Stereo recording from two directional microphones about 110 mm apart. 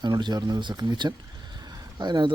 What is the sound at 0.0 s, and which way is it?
Speech, 40° right (ahead or behind).